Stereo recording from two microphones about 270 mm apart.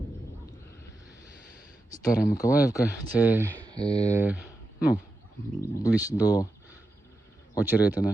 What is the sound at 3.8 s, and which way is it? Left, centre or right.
Speech, left.